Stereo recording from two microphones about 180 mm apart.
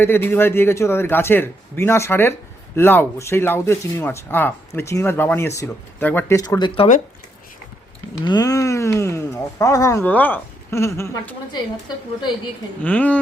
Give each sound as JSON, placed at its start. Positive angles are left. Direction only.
{"t": 0.0, "sound": "speech", "side_deg": 10}
{"t": 8.2, "sound": "speech", "side_deg": 20}
{"t": 12.8, "sound": "speech", "side_deg": 10}